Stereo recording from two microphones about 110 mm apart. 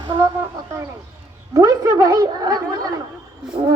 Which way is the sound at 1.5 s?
35° right (ahead or behind).